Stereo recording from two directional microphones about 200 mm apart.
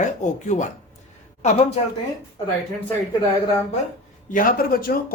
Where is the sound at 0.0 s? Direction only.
35° left (ahead or behind).